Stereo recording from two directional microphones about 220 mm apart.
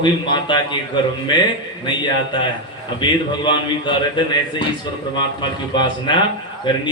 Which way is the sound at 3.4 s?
20° left (ahead or behind).